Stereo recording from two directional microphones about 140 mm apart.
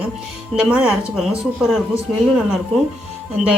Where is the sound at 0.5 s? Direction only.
5° right (ahead or behind).